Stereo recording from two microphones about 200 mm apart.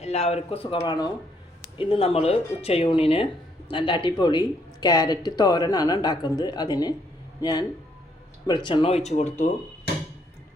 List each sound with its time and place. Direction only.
0.0 s speech: 30° left (ahead or behind)
8.4 s speech: 20° left (ahead or behind)